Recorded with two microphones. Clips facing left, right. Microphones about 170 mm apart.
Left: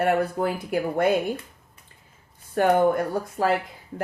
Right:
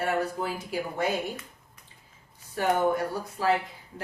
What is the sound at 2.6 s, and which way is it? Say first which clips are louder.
Speech: left 6 dB; 55° left (ahead or behind).